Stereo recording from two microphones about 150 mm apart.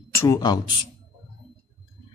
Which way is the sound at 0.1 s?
20° left (ahead or behind).